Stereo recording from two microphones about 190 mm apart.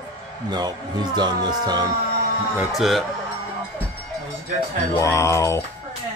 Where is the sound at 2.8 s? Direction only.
Centre (ahead or behind).